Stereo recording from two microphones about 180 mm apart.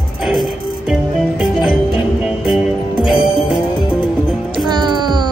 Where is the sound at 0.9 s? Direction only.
5° right (ahead or behind).